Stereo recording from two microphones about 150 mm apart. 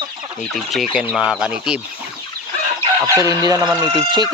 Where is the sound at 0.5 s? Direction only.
Centre (ahead or behind).